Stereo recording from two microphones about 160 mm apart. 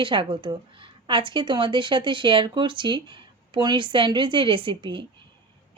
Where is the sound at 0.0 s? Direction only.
30° right (ahead or behind).